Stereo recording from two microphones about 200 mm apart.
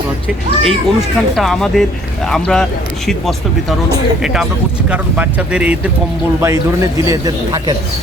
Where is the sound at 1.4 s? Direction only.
Centre (ahead or behind).